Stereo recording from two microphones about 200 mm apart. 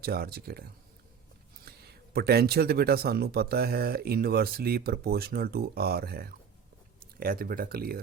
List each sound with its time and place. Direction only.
0.0 s speech: 50° right (ahead or behind)
1.6 s speech: 50° right (ahead or behind)